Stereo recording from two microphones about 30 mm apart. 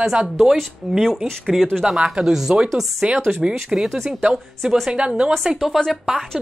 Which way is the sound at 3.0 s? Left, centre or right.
Right.